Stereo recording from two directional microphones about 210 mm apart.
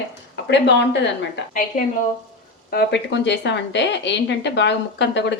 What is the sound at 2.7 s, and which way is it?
A woman's voice, 50° left (ahead or behind).